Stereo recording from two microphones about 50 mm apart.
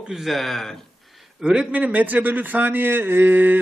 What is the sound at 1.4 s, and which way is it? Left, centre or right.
Speech, centre.